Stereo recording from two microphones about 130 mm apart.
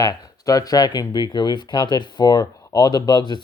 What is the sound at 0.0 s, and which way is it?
Speech, 30° left (ahead or behind).